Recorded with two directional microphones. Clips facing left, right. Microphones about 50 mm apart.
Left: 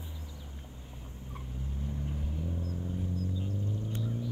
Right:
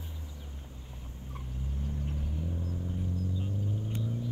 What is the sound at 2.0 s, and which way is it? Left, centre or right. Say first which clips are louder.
Vehicle: even; centre.